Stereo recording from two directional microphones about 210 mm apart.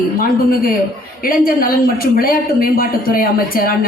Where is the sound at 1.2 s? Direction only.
45° left (ahead or behind).